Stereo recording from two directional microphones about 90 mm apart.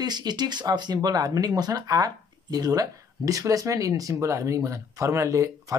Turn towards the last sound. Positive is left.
turn(degrees=-35)  # may be behind; listen again after turning